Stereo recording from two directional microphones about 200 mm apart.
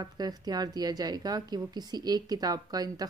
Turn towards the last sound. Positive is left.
turn(degrees=-20)  # may be behind; listen again after turning